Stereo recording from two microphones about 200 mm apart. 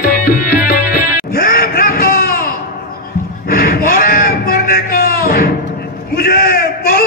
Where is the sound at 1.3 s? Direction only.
45° left (ahead or behind).